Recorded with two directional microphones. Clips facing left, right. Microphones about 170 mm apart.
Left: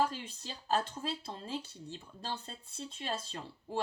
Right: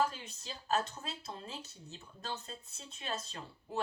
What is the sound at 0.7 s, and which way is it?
Speech, 35° left (ahead or behind).